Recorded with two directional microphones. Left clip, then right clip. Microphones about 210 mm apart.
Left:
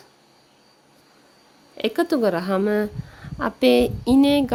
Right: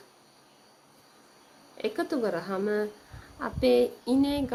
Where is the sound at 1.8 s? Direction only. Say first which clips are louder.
Left 9 dB; 45° left (ahead or behind).